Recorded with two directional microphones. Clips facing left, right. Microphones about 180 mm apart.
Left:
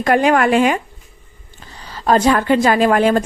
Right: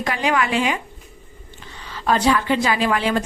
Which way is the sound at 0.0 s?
50° left (ahead or behind).